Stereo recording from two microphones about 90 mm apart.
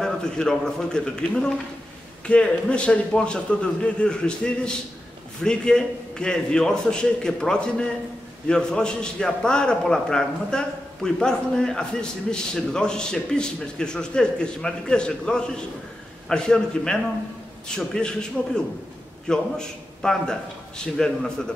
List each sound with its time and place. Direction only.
0.0 s a man's voice: 5° left (ahead or behind)
19.2 s a man's voice: 5° left (ahead or behind)